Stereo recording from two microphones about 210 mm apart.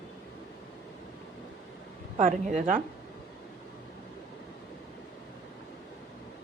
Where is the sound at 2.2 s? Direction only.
40° right (ahead or behind).